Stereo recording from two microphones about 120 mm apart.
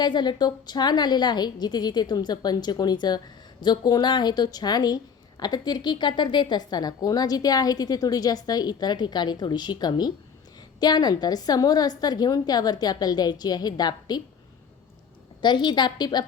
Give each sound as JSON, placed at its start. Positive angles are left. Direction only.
{"t": 0.0, "sound": "a woman's voice", "side_deg": 40}
{"t": 15.4, "sound": "a woman's voice", "side_deg": 40}